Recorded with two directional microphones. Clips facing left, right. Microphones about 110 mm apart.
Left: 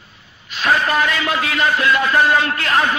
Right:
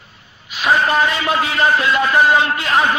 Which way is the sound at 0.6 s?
25° right (ahead or behind).